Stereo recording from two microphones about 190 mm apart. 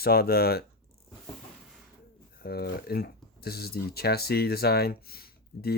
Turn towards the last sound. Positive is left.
turn(degrees=55)  # may be behind; listen again after turning